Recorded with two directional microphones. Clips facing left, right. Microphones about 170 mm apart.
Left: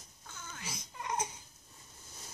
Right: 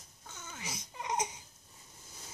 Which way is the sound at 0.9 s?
20° right (ahead or behind).